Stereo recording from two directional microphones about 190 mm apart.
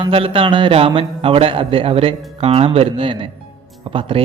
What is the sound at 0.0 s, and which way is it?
Speech, 30° right (ahead or behind).